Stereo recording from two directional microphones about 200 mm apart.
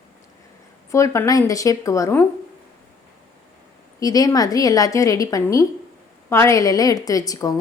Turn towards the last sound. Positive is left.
turn(degrees=15)  # may be behind; listen again after turning